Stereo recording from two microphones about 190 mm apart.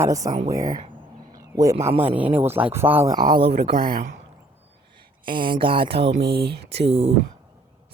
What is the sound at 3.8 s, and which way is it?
Speech, 50° right (ahead or behind).